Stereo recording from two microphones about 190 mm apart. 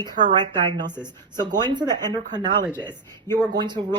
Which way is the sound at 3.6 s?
25° right (ahead or behind).